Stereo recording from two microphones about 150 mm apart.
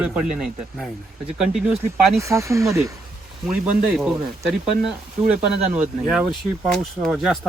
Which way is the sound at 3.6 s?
Centre (ahead or behind).